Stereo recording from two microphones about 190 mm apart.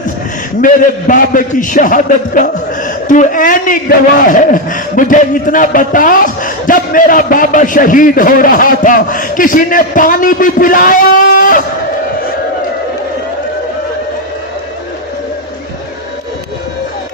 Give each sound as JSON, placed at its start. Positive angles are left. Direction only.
{"t": 0.6, "sound": "speech", "side_deg": 45}